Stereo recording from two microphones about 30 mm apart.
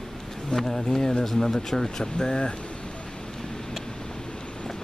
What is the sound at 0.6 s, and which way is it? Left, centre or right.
Speech, left.